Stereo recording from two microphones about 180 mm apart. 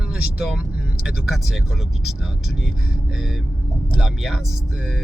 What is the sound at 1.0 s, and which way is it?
Speech, centre (ahead or behind).